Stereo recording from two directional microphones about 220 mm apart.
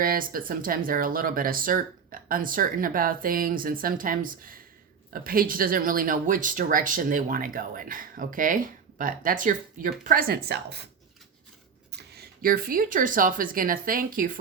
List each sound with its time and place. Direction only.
0.0 s speech: 40° right (ahead or behind)
11.9 s speech: 45° right (ahead or behind)